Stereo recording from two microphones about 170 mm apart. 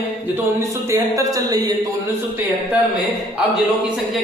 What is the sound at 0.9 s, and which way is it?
Speech, 15° right (ahead or behind).